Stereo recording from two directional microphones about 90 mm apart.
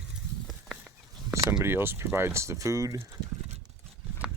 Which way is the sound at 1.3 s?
30° right (ahead or behind).